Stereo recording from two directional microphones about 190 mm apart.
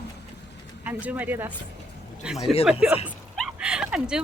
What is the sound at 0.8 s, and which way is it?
Speech, 10° right (ahead or behind).